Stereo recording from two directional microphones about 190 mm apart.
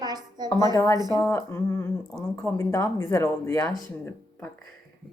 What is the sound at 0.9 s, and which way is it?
Speech, 20° right (ahead or behind).